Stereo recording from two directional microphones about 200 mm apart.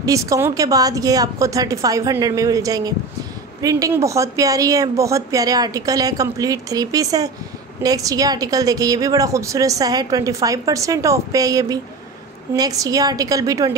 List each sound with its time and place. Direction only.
0.0 s a woman's voice: 15° right (ahead or behind)